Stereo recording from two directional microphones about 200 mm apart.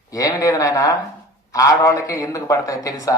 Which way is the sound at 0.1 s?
15° left (ahead or behind).